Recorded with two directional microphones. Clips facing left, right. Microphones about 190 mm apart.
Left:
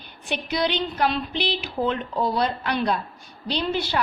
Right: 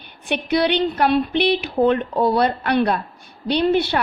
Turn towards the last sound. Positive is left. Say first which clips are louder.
# right 7 dB
turn(degrees=-60)  # may be behind; listen again after turning